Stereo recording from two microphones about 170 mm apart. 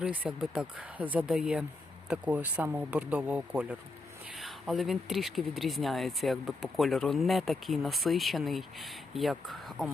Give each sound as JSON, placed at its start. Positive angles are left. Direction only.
{"t": 0.0, "sound": "speech", "side_deg": -5}